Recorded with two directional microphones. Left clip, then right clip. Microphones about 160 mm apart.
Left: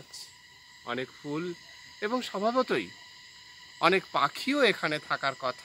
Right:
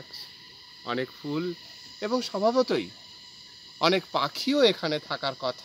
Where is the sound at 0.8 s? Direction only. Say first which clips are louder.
Right 4 dB; 90° right.